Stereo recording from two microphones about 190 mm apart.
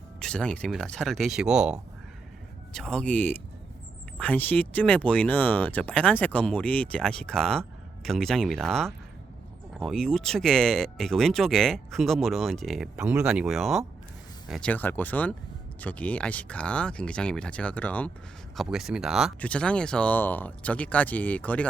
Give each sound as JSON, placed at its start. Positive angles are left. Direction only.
{"t": 0.2, "sound": "speech", "side_deg": 5}